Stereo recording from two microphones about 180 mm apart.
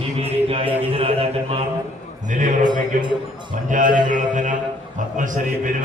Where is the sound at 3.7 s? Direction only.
45° right (ahead or behind).